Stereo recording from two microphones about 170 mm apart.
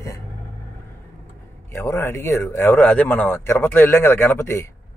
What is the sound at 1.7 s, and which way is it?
Speech, 15° left (ahead or behind).